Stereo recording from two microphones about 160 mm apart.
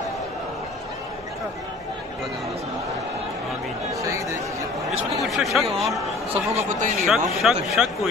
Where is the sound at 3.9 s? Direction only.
20° right (ahead or behind).